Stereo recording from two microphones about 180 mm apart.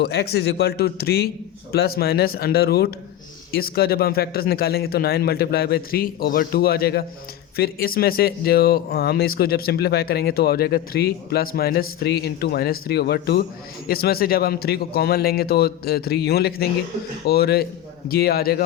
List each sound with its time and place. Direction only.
0.0 s speech: 65° left (ahead or behind)